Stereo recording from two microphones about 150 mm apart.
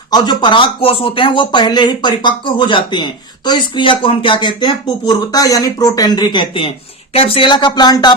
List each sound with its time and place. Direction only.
0.1 s speech: 30° left (ahead or behind)